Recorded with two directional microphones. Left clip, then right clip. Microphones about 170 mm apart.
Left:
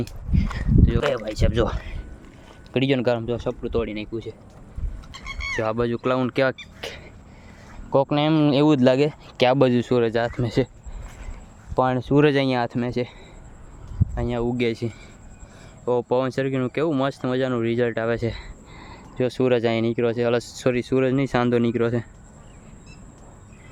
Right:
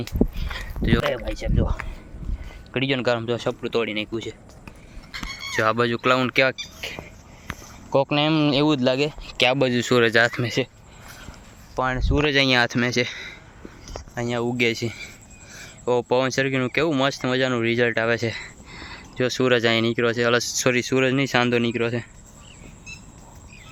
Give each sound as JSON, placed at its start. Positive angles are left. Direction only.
{"t": 0.0, "sound": "speech", "side_deg": 50}
{"t": 0.8, "sound": "speech", "side_deg": 5}
{"t": 2.7, "sound": "speech", "side_deg": 40}
{"t": 3.2, "sound": "speech", "side_deg": 5}
{"t": 3.9, "sound": "speech", "side_deg": -5}
{"t": 5.5, "sound": "speech", "side_deg": 5}
{"t": 6.8, "sound": "a sound", "side_deg": 40}
{"t": 7.9, "sound": "speech", "side_deg": 15}
{"t": 9.8, "sound": "speech", "side_deg": 5}
{"t": 11.8, "sound": "speech", "side_deg": 60}
{"t": 12.4, "sound": "speech", "side_deg": 10}